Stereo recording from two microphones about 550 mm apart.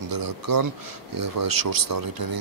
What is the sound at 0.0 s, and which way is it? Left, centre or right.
Speech, right.